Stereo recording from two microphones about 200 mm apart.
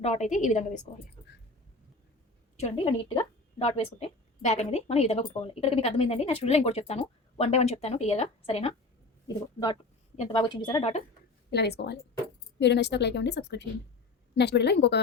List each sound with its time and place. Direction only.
0.0 s a woman's voice: 35° left (ahead or behind)
2.6 s a woman's voice: 30° left (ahead or behind)
11.5 s a woman's voice: 55° left (ahead or behind)